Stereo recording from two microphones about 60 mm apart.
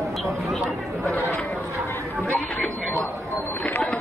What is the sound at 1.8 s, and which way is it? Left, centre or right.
Chatter, left.